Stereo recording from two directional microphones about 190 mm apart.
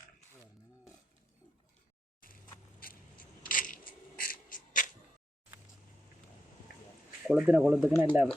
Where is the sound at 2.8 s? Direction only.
50° left (ahead or behind).